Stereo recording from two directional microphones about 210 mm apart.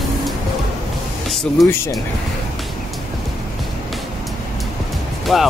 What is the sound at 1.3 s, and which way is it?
Speech, centre (ahead or behind).